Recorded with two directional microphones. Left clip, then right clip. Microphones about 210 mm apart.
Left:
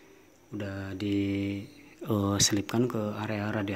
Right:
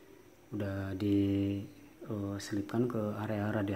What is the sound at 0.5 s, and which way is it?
Speech, centre (ahead or behind).